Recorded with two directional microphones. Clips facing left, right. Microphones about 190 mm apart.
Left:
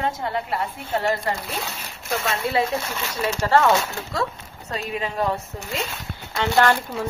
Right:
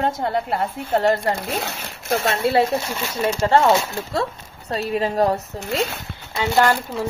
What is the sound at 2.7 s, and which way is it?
Speech, 20° right (ahead or behind).